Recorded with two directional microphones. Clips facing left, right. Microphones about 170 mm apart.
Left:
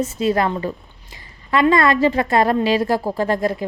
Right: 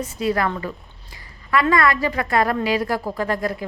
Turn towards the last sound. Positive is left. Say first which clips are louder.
# left 4 dB
turn(degrees=25)  # may be behind; listen again after turning